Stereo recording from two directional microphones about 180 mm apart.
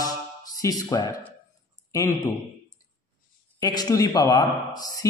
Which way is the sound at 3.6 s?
20° left (ahead or behind).